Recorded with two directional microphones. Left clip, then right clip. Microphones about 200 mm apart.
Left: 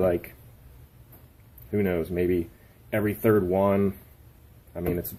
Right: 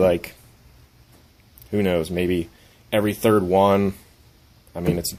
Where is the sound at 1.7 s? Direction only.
40° right (ahead or behind).